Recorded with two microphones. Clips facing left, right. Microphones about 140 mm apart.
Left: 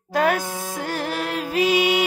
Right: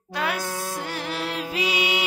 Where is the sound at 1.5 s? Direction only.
50° left (ahead or behind).